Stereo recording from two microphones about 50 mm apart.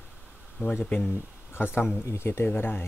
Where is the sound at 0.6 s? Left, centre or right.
Left.